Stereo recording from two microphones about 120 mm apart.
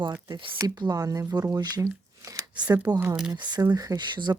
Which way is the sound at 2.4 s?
35° right (ahead or behind).